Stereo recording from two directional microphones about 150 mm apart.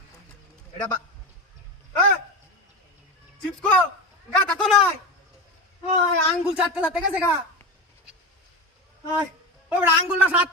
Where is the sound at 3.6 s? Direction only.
5° left (ahead or behind).